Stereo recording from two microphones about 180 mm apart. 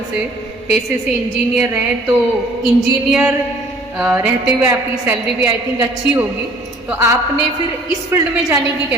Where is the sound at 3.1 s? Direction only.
5° right (ahead or behind).